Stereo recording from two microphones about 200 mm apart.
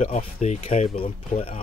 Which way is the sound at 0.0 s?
35° left (ahead or behind).